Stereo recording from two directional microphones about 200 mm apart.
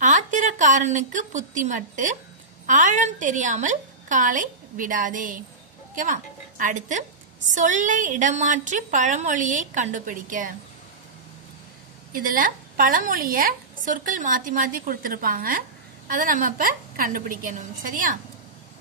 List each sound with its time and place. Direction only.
0.0 s a woman's voice: 40° right (ahead or behind)
12.1 s a woman's voice: 45° right (ahead or behind)